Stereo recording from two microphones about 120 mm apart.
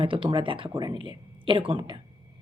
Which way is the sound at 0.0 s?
45° right (ahead or behind).